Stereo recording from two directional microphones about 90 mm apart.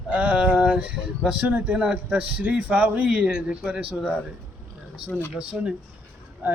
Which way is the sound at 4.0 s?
Centre (ahead or behind).